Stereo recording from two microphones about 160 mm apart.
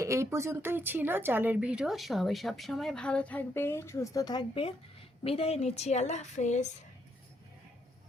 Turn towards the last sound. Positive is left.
turn(degrees=45)  # may be behind; listen again after turning